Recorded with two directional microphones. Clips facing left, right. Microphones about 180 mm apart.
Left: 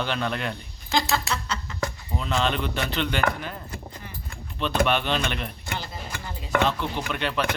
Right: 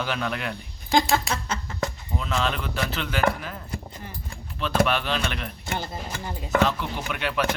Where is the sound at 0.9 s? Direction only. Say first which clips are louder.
Right 3 dB; 50° right (ahead or behind).